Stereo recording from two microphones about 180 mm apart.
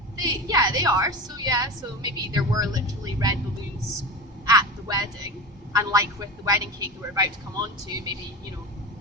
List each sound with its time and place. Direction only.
0.2 s a woman's voice: 20° right (ahead or behind)
4.4 s a sound: 20° right (ahead or behind)
5.7 s a woman's voice: 20° right (ahead or behind)